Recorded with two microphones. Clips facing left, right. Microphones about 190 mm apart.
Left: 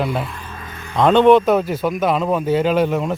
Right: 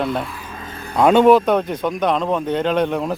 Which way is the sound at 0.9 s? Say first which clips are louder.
Even; 10° right (ahead or behind).